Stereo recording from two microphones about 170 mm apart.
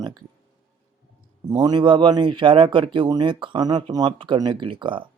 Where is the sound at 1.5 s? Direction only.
25° right (ahead or behind).